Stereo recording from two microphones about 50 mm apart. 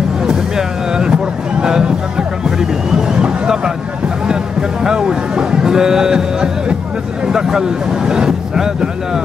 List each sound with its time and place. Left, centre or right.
0.2 s vehicle: centre
4.3 s music: centre
7.2 s vehicle: centre